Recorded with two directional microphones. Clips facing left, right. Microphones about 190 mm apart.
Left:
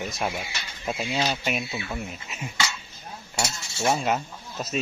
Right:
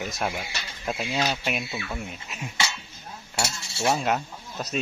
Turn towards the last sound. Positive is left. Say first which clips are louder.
# even
turn(degrees=0)  # may be behind; listen again after turning